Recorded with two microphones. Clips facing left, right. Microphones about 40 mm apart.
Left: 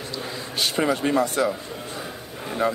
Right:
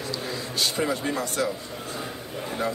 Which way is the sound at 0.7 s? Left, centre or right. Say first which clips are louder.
Left 8 dB; left.